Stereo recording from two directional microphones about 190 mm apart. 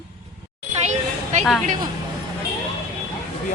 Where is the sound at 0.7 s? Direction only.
35° right (ahead or behind).